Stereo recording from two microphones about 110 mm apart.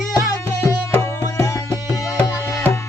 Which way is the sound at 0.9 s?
25° left (ahead or behind).